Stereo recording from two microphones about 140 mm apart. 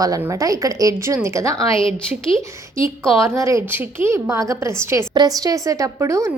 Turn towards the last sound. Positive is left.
turn(degrees=-20)  # may be behind; listen again after turning